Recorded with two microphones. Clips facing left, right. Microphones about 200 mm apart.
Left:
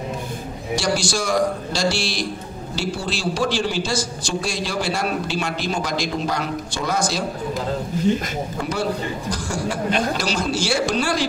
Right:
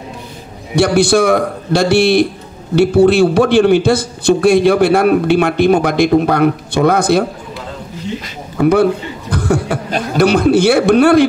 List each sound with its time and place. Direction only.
0.7 s a man's voice: 60° right (ahead or behind)
8.5 s a man's voice: 60° right (ahead or behind)